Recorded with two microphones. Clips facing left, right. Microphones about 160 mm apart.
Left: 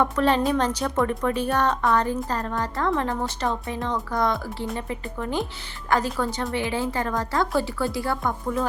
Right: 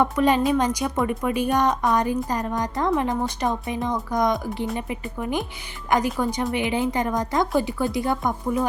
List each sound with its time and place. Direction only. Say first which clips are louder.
0.0 s a woman's voice: right 1 dB; 10° right (ahead or behind)